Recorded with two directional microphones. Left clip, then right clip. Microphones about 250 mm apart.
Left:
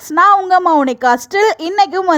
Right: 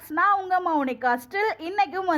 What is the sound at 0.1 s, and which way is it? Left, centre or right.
A woman's voice, left.